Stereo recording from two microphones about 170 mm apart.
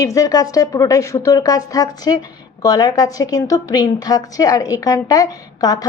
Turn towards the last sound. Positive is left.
turn(degrees=20)  # may be behind; listen again after turning